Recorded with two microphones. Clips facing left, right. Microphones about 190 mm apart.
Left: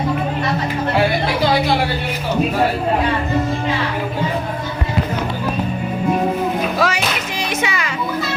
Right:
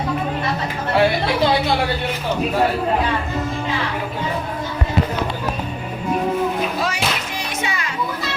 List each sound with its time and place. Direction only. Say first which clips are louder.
6.7 s music: left 4 dB; 90° left